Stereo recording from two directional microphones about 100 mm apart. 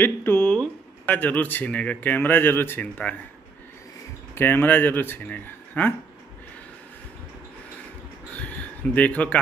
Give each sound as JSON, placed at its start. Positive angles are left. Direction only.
{"t": 0.0, "sound": "a sound", "side_deg": 20}
{"t": 1.0, "sound": "speech", "side_deg": 20}
{"t": 4.4, "sound": "speech", "side_deg": 20}
{"t": 8.9, "sound": "speech", "side_deg": 15}